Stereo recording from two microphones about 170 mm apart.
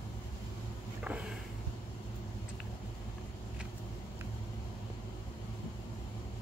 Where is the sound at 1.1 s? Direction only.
5° right (ahead or behind).